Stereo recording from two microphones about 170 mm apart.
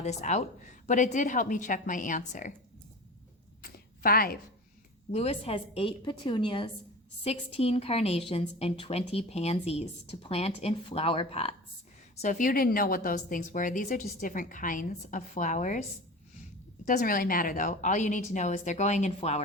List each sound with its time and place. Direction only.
0.0 s a woman's voice: 40° left (ahead or behind)
3.6 s a sound: 60° left (ahead or behind)
5.1 s a woman's voice: 35° left (ahead or behind)
16.8 s a woman's voice: 55° left (ahead or behind); by 19.4 s 40° left (ahead or behind)